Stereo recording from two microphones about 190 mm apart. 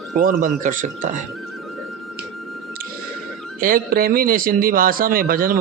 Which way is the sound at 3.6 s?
50° right (ahead or behind).